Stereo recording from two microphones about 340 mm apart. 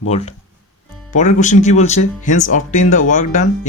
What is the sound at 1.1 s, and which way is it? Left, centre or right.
Speech, left.